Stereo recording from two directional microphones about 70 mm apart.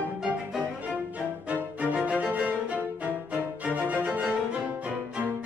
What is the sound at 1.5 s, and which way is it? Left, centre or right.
Music, centre.